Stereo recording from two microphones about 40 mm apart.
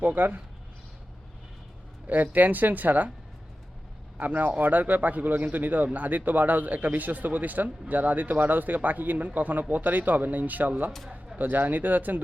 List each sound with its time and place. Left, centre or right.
0.0 s a man's voice: right
2.0 s a man's voice: right
4.2 s a man's voice: right